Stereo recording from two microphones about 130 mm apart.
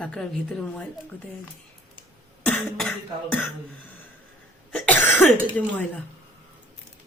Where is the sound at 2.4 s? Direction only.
5° left (ahead or behind).